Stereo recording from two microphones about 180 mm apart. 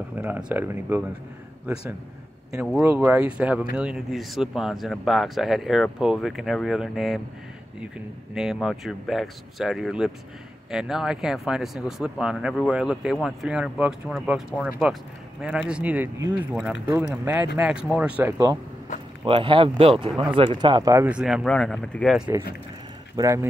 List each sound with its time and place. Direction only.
0.2 s speech: 10° right (ahead or behind)
3.0 s speech: 5° right (ahead or behind)
8.4 s speech: centre (ahead or behind)
15.7 s speech: 10° right (ahead or behind)
19.2 s speech: 30° right (ahead or behind); by 22.3 s centre (ahead or behind)
23.1 s speech: 15° right (ahead or behind)